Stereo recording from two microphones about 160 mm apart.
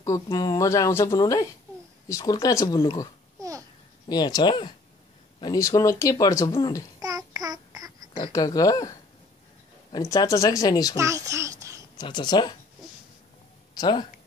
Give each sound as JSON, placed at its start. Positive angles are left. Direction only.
{"t": 0.0, "sound": "speech", "side_deg": 20}
{"t": 4.1, "sound": "speech", "side_deg": 25}
{"t": 7.0, "sound": "child singing", "side_deg": -20}
{"t": 8.2, "sound": "speech", "side_deg": 25}
{"t": 9.9, "sound": "speech", "side_deg": 20}
{"t": 11.0, "sound": "a sound", "side_deg": -20}
{"t": 12.0, "sound": "speech", "side_deg": 30}
{"t": 13.7, "sound": "speech", "side_deg": 25}